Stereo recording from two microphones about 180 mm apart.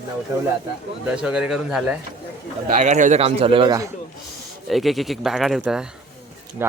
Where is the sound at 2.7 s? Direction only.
40° right (ahead or behind); by 3.9 s 25° right (ahead or behind).